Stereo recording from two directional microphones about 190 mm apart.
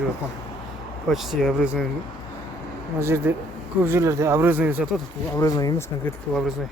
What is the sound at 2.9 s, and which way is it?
Speech, 15° right (ahead or behind).